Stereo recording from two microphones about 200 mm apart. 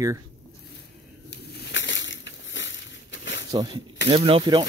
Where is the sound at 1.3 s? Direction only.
65° left (ahead or behind).